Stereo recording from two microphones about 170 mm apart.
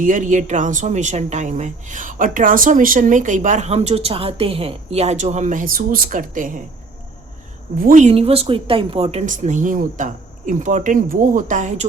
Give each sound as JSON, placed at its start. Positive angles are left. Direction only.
{"t": 0.0, "sound": "speech", "side_deg": -50}
{"t": 7.8, "sound": "speech", "side_deg": -50}
{"t": 9.2, "sound": "speech", "side_deg": -45}